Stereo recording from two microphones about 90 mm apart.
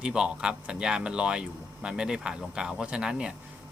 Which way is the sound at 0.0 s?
10° right (ahead or behind).